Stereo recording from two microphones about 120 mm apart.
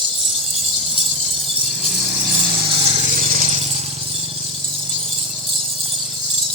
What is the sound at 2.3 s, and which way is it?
Power tool, 45° right (ahead or behind).